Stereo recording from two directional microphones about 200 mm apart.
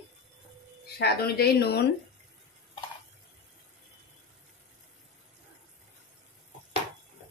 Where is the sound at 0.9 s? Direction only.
50° left (ahead or behind).